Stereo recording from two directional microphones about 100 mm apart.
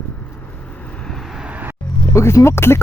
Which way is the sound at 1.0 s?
Centre (ahead or behind).